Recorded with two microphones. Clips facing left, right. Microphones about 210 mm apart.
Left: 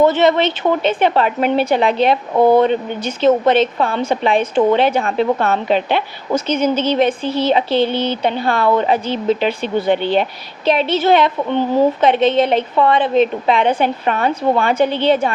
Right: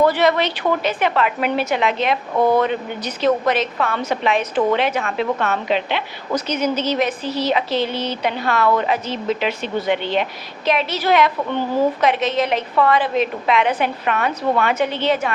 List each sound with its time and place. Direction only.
0.0 s speech: 25° left (ahead or behind); by 6.0 s 40° left (ahead or behind)
6.3 s speech: 30° left (ahead or behind)